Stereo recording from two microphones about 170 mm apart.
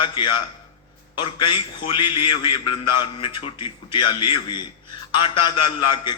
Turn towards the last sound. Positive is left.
turn(degrees=25)  # may be behind; listen again after turning